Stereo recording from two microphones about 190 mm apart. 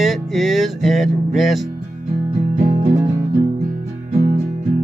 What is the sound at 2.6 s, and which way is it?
Music, 35° right (ahead or behind).